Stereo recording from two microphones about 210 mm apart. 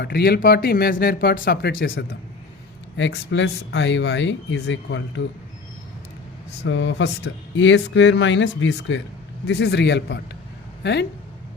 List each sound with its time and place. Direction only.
0.0 s speech: 50° left (ahead or behind)
6.7 s speech: 60° left (ahead or behind)